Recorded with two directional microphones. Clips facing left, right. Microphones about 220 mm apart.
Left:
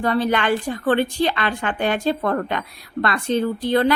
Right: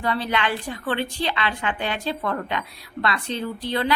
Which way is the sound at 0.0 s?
45° left (ahead or behind).